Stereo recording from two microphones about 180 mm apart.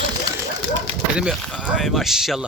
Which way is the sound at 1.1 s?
Centre (ahead or behind).